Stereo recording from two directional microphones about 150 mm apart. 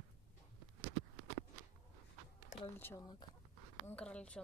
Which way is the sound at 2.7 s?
15° left (ahead or behind).